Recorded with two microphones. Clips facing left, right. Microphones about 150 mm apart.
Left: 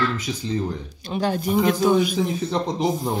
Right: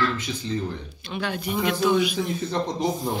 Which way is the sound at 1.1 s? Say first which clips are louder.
Left 6 dB; 40° left (ahead or behind).